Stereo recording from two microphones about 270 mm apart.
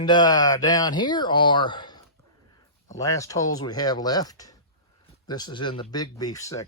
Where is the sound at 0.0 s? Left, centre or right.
Centre.